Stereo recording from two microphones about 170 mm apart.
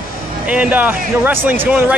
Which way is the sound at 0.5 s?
10° right (ahead or behind).